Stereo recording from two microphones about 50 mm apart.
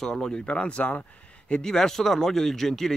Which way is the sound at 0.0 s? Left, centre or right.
Centre.